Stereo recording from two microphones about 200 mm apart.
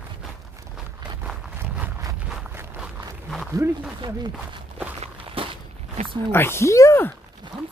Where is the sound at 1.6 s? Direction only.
15° right (ahead or behind).